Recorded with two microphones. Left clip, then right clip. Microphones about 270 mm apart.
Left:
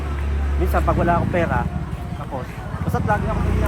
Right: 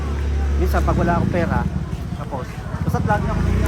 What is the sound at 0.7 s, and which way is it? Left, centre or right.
Speech, centre.